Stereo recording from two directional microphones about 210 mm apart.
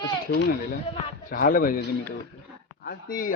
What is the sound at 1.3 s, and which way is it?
Speech, 40° left (ahead or behind).